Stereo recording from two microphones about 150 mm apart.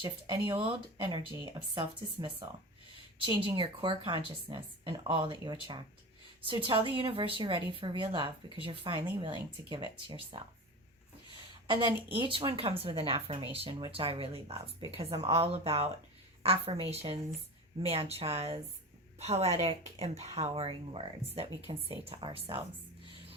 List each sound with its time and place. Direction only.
0.0 s speech: 30° right (ahead or behind)
12.4 s speech: 35° right (ahead or behind)